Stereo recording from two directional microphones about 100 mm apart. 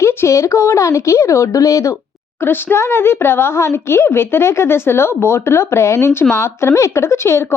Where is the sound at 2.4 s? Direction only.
20° left (ahead or behind).